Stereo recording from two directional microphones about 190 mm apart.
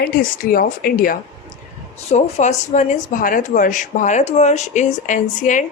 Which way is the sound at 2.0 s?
35° left (ahead or behind).